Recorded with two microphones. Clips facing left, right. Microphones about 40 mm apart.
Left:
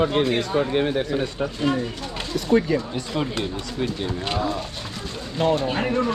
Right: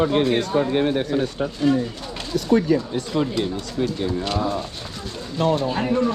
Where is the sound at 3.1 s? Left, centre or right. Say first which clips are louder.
Right 3 dB; left.